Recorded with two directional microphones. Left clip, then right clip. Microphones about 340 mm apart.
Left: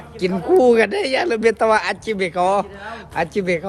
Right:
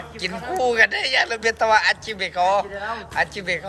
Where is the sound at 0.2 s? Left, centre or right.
Centre.